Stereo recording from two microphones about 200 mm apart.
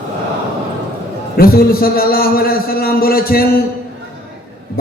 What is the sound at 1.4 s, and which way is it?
A man's voice, 50° left (ahead or behind).